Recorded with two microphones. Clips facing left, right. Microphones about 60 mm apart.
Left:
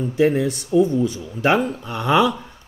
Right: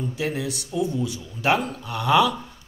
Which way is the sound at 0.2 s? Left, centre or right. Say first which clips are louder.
Left 12 dB; left.